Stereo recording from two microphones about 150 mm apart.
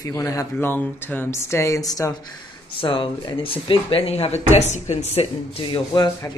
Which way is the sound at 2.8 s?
35° left (ahead or behind).